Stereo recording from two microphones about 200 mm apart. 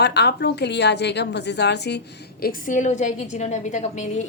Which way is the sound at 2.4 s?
45° left (ahead or behind).